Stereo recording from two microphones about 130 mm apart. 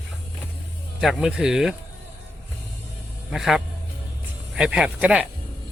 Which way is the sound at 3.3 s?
Centre (ahead or behind).